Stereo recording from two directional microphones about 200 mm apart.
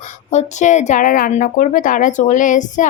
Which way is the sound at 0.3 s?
35° left (ahead or behind).